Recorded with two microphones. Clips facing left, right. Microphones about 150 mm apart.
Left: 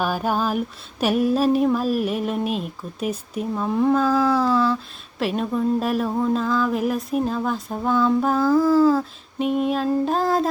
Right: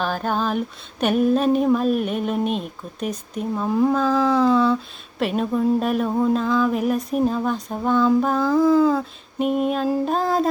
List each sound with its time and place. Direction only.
0.0 s speech: 10° left (ahead or behind)